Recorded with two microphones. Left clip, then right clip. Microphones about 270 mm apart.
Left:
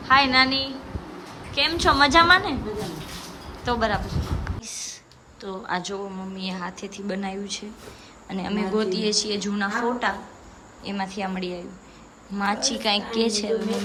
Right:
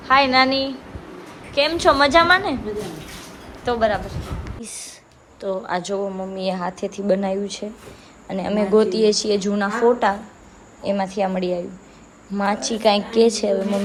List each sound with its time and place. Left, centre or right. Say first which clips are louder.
0.0 s a woman's voice: right 3 dB; centre
3.6 s a woman's voice: right 4 dB; centre
4.6 s a sound: left 1 dB; centre
5.4 s a woman's voice: right 5 dB; centre